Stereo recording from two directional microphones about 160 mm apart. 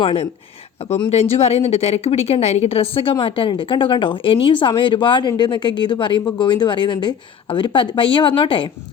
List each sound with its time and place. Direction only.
0.0 s speech: 35° left (ahead or behind)